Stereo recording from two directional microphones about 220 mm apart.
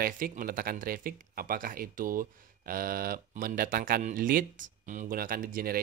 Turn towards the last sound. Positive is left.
turn(degrees=-40)  # may be behind; listen again after turning